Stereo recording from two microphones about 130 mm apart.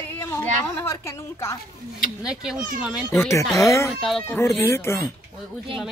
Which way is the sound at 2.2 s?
5° right (ahead or behind).